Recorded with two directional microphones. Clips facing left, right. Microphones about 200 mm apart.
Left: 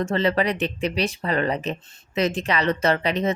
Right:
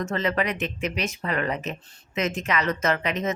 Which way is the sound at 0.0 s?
30° left (ahead or behind).